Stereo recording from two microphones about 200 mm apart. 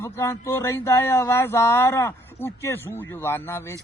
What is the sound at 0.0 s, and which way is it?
Speech, 15° left (ahead or behind).